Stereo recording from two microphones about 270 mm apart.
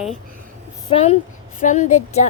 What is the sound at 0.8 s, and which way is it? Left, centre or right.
Speech, left.